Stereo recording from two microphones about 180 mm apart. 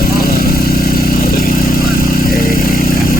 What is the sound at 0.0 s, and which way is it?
Vehicle, 55° left (ahead or behind).